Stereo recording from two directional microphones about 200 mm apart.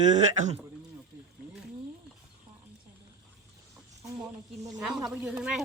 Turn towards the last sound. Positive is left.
turn(degrees=-5)  # may be behind; listen again after turning